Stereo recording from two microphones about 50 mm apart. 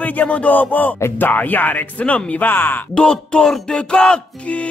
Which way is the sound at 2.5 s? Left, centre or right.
Left.